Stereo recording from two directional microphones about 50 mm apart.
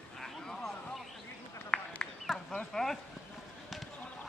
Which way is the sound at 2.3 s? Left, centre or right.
Centre.